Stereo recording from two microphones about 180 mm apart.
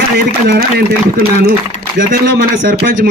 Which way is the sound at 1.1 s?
55° right (ahead or behind).